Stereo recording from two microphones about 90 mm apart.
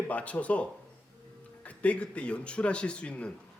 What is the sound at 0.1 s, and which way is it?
Speech, 15° left (ahead or behind).